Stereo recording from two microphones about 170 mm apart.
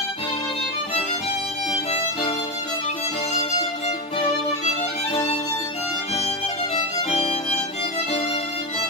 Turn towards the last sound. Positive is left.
turn(degrees=40)  # may be behind; listen again after turning